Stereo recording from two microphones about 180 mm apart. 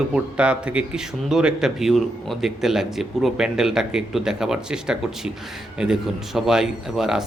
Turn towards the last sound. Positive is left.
turn(degrees=-5)  # may be behind; listen again after turning